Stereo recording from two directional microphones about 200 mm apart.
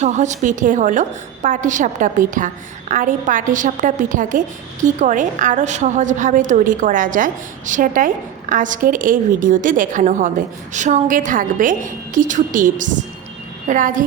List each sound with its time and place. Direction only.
0.0 s a woman's voice: 35° right (ahead or behind)